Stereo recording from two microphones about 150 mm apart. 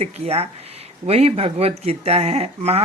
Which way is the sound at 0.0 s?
45° right (ahead or behind).